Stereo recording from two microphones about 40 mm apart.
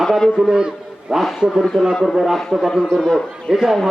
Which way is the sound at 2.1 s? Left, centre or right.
Centre.